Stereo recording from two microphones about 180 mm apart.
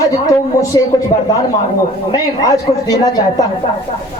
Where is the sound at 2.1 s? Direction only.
20° left (ahead or behind).